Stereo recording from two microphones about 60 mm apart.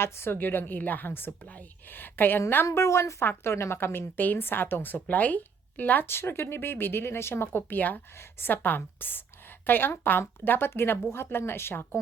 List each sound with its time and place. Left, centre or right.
0.0 s a woman's voice: left
2.7 s a woman's voice: left
3.2 s a woman's voice: left
7.8 s a woman's voice: left